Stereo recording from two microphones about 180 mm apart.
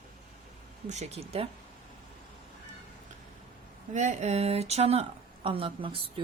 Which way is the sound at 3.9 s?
40° right (ahead or behind).